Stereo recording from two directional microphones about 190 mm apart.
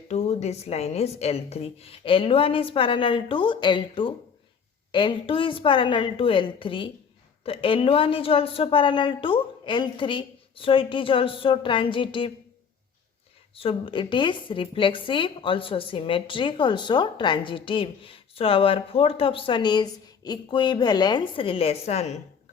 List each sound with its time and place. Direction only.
0.1 s a woman's voice: 35° left (ahead or behind)
13.6 s a woman's voice: 30° left (ahead or behind)